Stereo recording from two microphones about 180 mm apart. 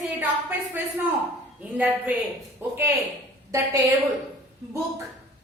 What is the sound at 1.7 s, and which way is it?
A woman's voice, 10° right (ahead or behind).